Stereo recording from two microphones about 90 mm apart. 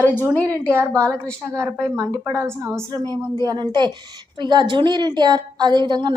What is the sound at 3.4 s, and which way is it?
A woman's voice, 55° right (ahead or behind).